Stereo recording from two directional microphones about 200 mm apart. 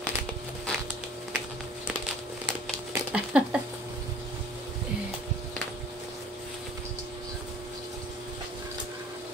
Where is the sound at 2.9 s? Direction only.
5° right (ahead or behind).